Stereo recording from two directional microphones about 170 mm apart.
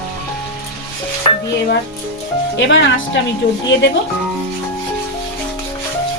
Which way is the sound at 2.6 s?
90° left.